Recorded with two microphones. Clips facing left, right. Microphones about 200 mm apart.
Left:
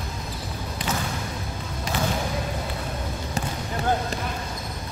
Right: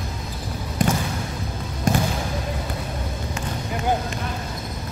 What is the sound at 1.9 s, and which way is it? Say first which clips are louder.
Basketball bounce: right 8 dB; 45° right (ahead or behind).